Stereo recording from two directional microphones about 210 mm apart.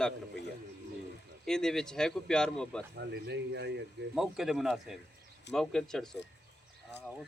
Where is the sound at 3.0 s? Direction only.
55° right (ahead or behind).